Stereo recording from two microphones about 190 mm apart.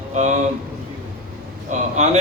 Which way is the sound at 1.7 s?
40° right (ahead or behind).